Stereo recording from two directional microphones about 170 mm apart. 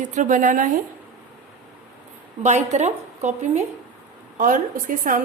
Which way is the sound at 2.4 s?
45° right (ahead or behind).